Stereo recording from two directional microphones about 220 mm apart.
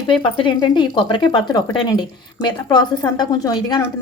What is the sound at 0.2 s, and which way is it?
A woman's voice, 20° left (ahead or behind).